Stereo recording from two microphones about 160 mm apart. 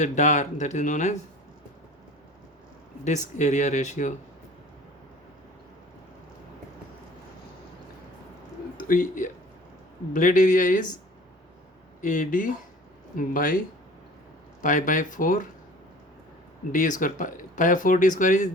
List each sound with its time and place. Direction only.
0.0 s speech: 50° left (ahead or behind)
3.0 s speech: 50° left (ahead or behind)
8.8 s speech: 55° left (ahead or behind)
12.0 s speech: 55° left (ahead or behind)
14.6 s speech: 55° left (ahead or behind)
16.7 s speech: 55° left (ahead or behind)